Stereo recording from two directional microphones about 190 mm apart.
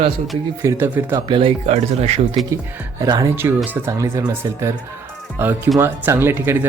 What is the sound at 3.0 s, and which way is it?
Speech, 20° right (ahead or behind).